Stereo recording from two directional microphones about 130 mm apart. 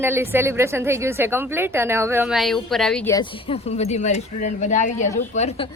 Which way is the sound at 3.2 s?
50° left (ahead or behind).